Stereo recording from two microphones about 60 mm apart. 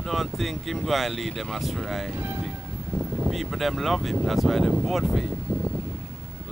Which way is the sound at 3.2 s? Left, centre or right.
Centre.